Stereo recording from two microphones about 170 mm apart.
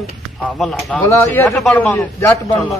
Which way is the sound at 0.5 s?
Centre (ahead or behind).